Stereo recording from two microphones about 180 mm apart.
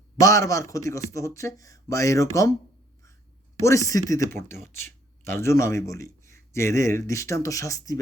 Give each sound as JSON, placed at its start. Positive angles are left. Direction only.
{"t": 0.2, "sound": "speech", "side_deg": 15}
{"t": 3.6, "sound": "speech", "side_deg": 15}